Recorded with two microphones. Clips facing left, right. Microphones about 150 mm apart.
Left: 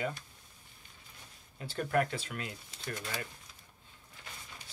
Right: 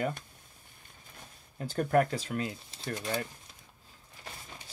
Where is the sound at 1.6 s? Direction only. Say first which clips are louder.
Right 5 dB; 45° right (ahead or behind); by 3.2 s 25° right (ahead or behind).